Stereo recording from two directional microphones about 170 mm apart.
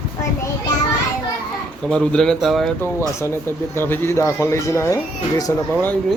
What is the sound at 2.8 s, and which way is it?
Speech, 15° left (ahead or behind).